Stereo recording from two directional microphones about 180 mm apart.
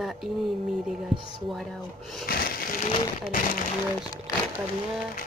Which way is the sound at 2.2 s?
55° left (ahead or behind).